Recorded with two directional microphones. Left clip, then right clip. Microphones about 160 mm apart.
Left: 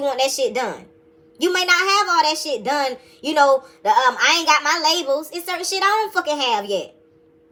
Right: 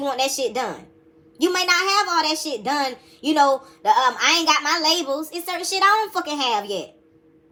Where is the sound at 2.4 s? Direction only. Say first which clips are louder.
Left 2 dB; 20° right (ahead or behind).